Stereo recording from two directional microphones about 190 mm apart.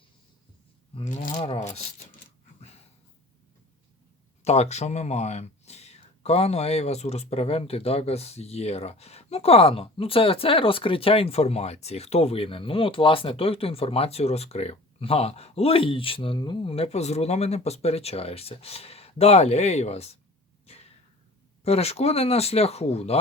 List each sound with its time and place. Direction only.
0.9 s speech: 40° left (ahead or behind)
4.4 s speech: 35° left (ahead or behind)
21.6 s speech: 35° left (ahead or behind)